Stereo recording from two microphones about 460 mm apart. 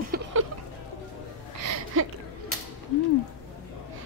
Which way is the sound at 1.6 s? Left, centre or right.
Right.